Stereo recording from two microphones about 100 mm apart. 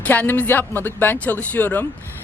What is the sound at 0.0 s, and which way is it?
Speech, 20° left (ahead or behind).